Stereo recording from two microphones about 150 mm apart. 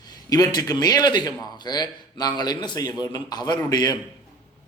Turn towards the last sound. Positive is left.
turn(degrees=25)  # may be behind; listen again after turning